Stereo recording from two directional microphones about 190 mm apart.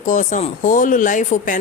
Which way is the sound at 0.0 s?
40° left (ahead or behind).